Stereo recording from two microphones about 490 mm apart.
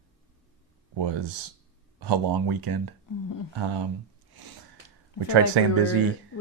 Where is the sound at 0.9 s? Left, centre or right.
Right.